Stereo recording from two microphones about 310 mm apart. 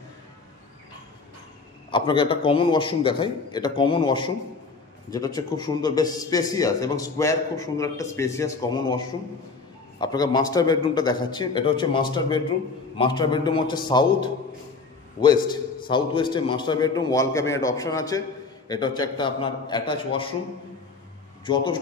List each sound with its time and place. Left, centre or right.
1.9 s a man's voice: centre